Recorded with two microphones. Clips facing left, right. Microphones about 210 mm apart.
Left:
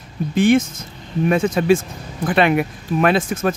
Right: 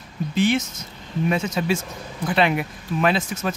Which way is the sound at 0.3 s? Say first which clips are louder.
Left 6 dB; 50° left (ahead or behind).